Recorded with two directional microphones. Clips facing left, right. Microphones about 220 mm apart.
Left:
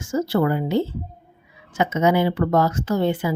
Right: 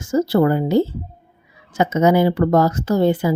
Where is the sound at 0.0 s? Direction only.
40° right (ahead or behind).